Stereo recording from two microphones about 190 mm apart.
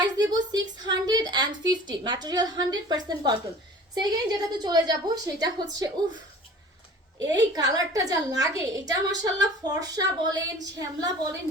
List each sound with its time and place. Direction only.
0.3 s a woman's voice: 20° right (ahead or behind)
7.3 s a woman's voice: 20° right (ahead or behind)